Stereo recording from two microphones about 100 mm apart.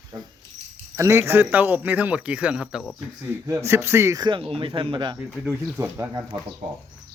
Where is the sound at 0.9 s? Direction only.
30° right (ahead or behind); by 2.8 s 10° right (ahead or behind).